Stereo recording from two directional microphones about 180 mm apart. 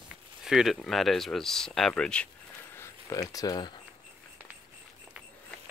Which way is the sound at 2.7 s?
15° left (ahead or behind).